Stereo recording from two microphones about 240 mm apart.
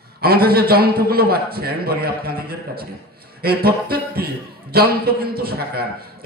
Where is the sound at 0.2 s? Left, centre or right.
Right.